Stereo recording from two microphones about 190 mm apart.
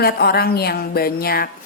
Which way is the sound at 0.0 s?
55° left (ahead or behind).